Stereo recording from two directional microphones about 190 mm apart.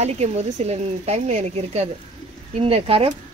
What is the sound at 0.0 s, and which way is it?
Speech, 35° right (ahead or behind).